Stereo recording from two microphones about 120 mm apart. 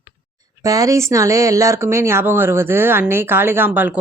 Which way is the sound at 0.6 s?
30° right (ahead or behind).